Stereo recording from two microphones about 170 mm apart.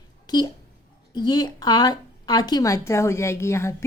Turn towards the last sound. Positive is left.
turn(degrees=15)  # may be behind; listen again after turning